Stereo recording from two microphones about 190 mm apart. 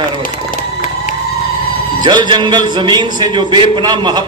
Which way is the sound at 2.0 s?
25° right (ahead or behind).